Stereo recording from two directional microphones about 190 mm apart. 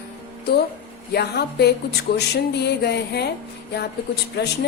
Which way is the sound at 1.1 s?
60° left (ahead or behind).